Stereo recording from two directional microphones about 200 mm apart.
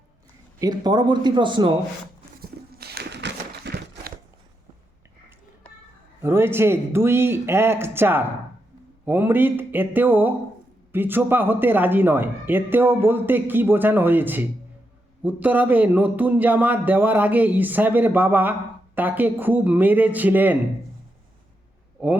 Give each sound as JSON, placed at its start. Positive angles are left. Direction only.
{"t": 0.6, "sound": "speech", "side_deg": -20}
{"t": 2.4, "sound": "a sound", "side_deg": -50}
{"t": 6.2, "sound": "speech", "side_deg": -10}